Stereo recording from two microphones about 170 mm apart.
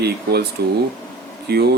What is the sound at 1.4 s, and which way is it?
Speech, 70° right (ahead or behind).